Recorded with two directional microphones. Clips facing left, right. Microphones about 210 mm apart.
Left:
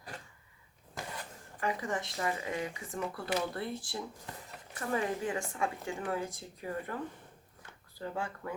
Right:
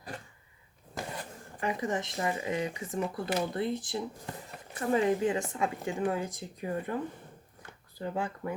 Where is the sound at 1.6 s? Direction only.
20° right (ahead or behind).